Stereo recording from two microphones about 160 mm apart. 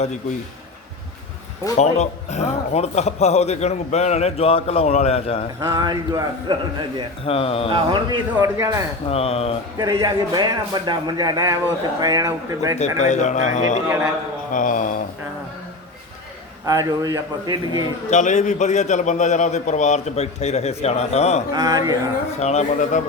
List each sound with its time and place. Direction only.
1.8 s a man's voice: 45° left (ahead or behind)
5.5 s a man's voice: 20° right (ahead or behind)
7.3 s speech: 35° left (ahead or behind)
7.7 s a man's voice: 30° right (ahead or behind)
9.0 s speech: 40° left (ahead or behind)
9.7 s a man's voice: 25° right (ahead or behind)
13.0 s a man's voice: 50° left (ahead or behind)
16.6 s a man's voice: 20° right (ahead or behind)
18.1 s a man's voice: 50° left (ahead or behind)
21.5 s a man's voice: 25° right (ahead or behind)
22.4 s a man's voice: 45° left (ahead or behind)